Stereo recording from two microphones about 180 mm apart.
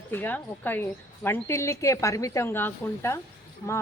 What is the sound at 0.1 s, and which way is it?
Speech, 10° left (ahead or behind).